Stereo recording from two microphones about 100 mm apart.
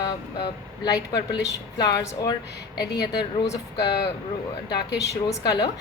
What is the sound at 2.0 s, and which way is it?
Speech, 30° left (ahead or behind).